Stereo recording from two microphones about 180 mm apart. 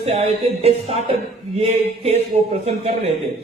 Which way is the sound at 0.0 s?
35° right (ahead or behind).